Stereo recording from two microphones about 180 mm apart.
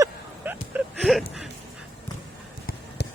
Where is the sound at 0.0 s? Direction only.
10° right (ahead or behind).